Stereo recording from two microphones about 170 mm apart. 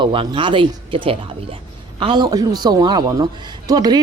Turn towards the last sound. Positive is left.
turn(degrees=-25)  # may be behind; listen again after turning